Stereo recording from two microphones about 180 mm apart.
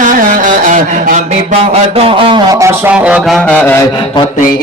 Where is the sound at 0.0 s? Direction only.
45° right (ahead or behind); by 3.8 s 10° left (ahead or behind).